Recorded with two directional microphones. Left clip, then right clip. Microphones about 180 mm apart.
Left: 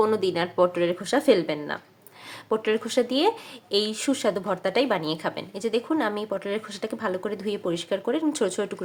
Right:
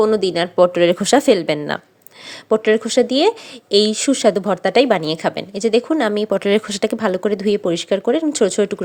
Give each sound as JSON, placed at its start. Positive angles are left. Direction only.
{"t": 0.0, "sound": "speech", "side_deg": -30}
{"t": 2.5, "sound": "speech", "side_deg": -35}